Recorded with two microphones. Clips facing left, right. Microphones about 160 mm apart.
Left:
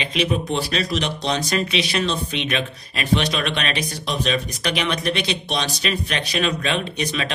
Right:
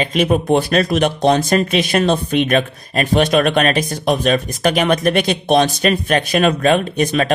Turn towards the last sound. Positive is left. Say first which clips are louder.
# right 9 dB
turn(degrees=-50)  # may be behind; listen again after turning